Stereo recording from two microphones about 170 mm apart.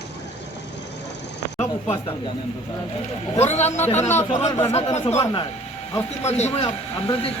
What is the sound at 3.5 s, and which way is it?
Speech, 40° left (ahead or behind).